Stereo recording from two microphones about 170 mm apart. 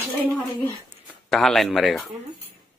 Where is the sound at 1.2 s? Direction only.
Centre (ahead or behind).